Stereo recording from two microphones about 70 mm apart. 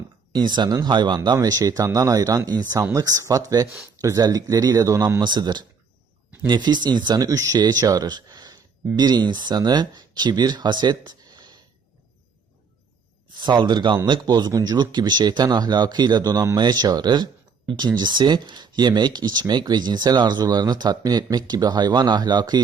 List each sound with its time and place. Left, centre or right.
0.3 s speech: right
5.2 s speech: right
9.0 s speech: right
13.3 s speech: right
14.5 s speech: right
16.6 s speech: right